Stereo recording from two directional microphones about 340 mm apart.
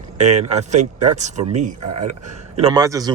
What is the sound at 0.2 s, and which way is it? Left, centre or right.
Speech, centre.